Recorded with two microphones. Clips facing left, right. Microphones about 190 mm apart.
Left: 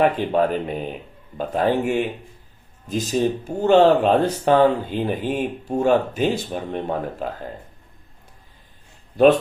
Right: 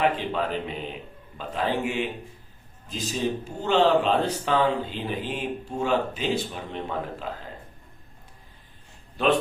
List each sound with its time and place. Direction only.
0.0 s speech: 45° left (ahead or behind)
3.1 s speech: 50° left (ahead or behind)